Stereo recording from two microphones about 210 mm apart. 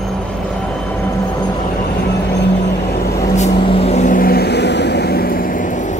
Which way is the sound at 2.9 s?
50° left (ahead or behind).